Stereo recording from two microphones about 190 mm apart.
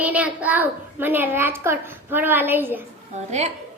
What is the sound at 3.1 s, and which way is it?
Speech, 35° right (ahead or behind).